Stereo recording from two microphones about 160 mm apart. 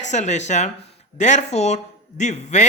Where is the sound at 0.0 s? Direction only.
45° left (ahead or behind).